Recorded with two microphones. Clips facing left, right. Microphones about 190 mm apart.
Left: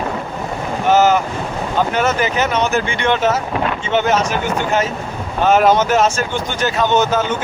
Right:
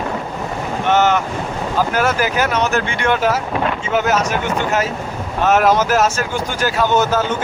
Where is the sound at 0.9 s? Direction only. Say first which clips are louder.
Left 2 dB; 5° left (ahead or behind).